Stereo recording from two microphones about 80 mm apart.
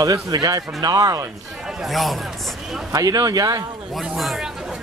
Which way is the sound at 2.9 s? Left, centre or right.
Right.